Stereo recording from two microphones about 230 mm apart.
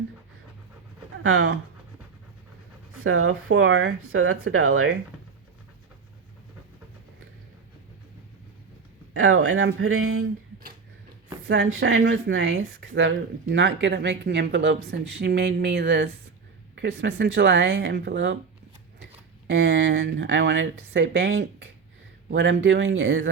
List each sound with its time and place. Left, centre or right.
1.2 s speech: right
3.0 s speech: right
9.1 s speech: right
11.4 s speech: right
19.5 s speech: right